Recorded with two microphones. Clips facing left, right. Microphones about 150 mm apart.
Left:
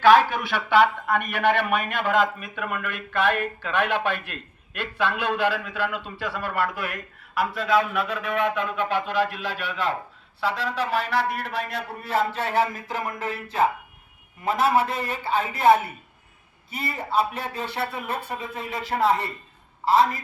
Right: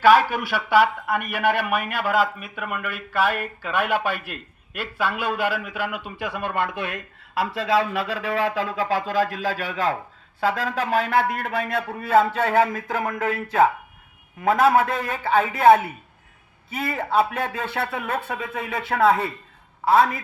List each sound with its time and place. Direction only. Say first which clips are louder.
0.0 s a man's voice: even; 10° right (ahead or behind); by 15.7 s 55° right (ahead or behind)
16.7 s a man's voice: right 3 dB; 55° right (ahead or behind)